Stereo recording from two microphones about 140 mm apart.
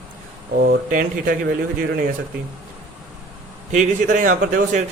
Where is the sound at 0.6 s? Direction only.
90° right.